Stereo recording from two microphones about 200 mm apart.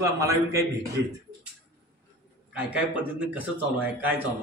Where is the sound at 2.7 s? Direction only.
5° right (ahead or behind).